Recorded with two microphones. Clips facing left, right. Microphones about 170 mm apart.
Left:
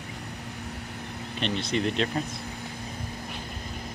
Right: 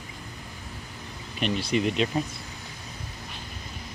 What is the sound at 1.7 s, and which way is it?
Speech, 5° right (ahead or behind).